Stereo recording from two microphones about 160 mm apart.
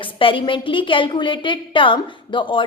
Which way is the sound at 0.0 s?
30° left (ahead or behind).